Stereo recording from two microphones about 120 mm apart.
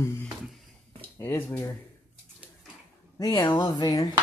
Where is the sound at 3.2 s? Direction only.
35° left (ahead or behind).